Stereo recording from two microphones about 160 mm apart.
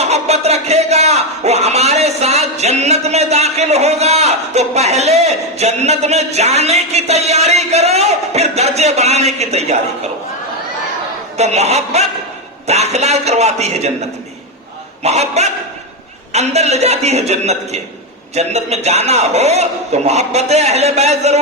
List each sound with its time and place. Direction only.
0.0 s speech: 45° right (ahead or behind)
11.3 s a man's voice: 45° right (ahead or behind)
15.0 s a man's voice: 40° right (ahead or behind)